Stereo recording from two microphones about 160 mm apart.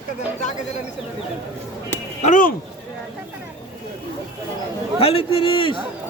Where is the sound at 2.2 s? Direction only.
55° left (ahead or behind).